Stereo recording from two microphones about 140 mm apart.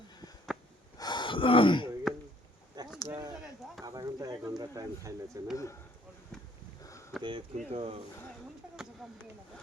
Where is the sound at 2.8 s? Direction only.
30° right (ahead or behind).